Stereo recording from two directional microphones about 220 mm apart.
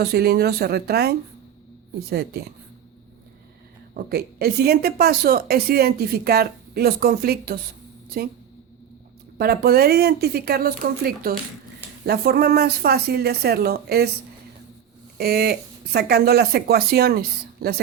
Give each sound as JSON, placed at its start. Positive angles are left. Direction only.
{"t": 0.0, "sound": "a woman's voice", "side_deg": -45}
{"t": 3.9, "sound": "a woman's voice", "side_deg": -45}
{"t": 9.4, "sound": "a woman's voice", "side_deg": -45}
{"t": 15.2, "sound": "a woman's voice", "side_deg": -45}